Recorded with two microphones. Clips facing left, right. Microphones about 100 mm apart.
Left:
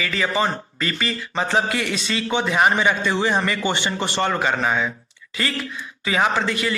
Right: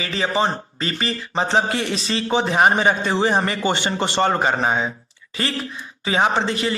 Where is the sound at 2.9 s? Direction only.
50° right (ahead or behind).